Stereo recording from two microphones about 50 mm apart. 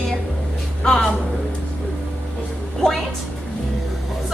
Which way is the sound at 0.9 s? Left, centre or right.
Centre.